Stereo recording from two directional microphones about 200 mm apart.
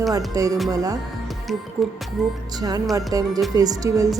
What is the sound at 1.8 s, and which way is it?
Music, centre (ahead or behind).